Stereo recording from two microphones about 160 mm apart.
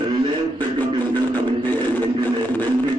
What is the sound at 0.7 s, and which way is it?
Music, 25° right (ahead or behind).